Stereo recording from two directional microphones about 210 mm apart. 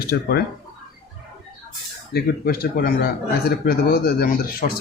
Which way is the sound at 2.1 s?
45° left (ahead or behind).